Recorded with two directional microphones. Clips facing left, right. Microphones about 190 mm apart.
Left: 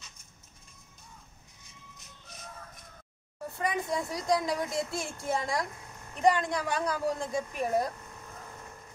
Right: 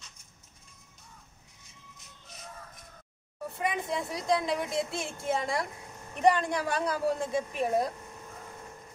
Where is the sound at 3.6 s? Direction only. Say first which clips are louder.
Left 1 dB; centre (ahead or behind).